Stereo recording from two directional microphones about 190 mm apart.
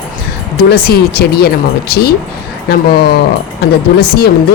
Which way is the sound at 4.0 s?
55° left (ahead or behind).